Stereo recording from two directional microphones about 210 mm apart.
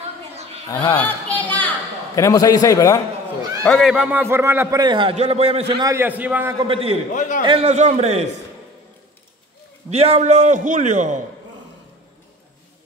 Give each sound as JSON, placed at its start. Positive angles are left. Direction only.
{"t": 0.7, "sound": "a man's voice", "side_deg": 15}
{"t": 0.9, "sound": "a sound", "side_deg": 5}
{"t": 2.1, "sound": "a man's voice", "side_deg": 15}
{"t": 3.6, "sound": "a man's voice", "side_deg": 0}
{"t": 5.9, "sound": "a man's voice", "side_deg": -10}
{"t": 6.6, "sound": "a man's voice", "side_deg": -25}
{"t": 7.1, "sound": "a man's voice", "side_deg": 35}
{"t": 7.4, "sound": "a man's voice", "side_deg": -30}
{"t": 9.8, "sound": "a man's voice", "side_deg": -30}